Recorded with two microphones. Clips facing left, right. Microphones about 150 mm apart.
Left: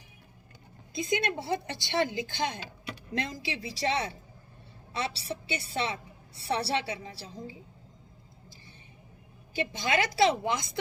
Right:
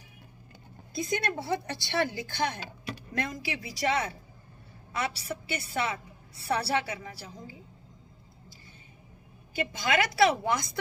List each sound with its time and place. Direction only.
0.9 s a woman's voice: 20° left (ahead or behind)
9.6 s a woman's voice: 25° left (ahead or behind)